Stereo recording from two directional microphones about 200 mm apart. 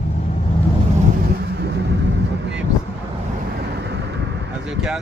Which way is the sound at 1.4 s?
55° right (ahead or behind).